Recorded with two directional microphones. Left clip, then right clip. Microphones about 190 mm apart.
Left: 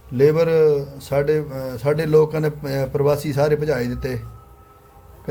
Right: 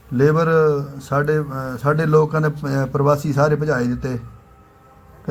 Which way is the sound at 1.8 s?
5° left (ahead or behind).